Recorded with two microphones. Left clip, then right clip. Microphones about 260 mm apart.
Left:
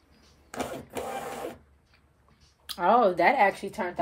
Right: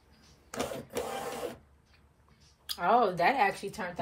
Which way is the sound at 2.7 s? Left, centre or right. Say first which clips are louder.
Left 4 dB; left.